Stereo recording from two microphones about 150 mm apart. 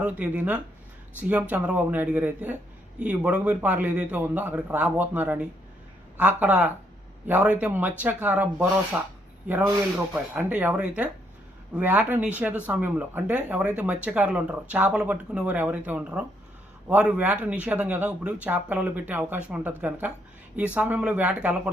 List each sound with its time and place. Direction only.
0.0 s speech: 10° right (ahead or behind)